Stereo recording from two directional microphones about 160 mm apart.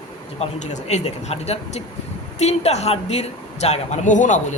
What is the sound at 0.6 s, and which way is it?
Speech, 45° left (ahead or behind).